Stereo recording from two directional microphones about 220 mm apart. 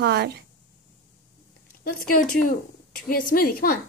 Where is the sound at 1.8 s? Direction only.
40° left (ahead or behind).